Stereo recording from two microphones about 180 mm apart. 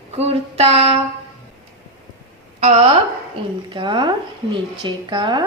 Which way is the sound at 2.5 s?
40° right (ahead or behind).